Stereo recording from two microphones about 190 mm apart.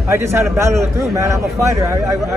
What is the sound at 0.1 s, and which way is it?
A man's voice, 15° right (ahead or behind).